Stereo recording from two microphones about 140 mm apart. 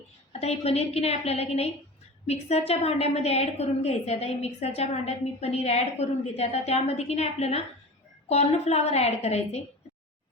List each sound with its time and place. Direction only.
0.3 s a woman's voice: 50° left (ahead or behind)